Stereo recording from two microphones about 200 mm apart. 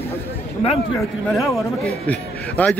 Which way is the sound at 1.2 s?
Centre (ahead or behind).